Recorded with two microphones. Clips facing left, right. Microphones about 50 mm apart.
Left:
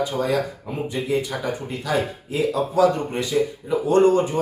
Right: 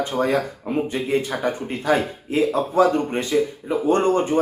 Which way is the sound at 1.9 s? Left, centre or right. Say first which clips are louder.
Right 3 dB; right.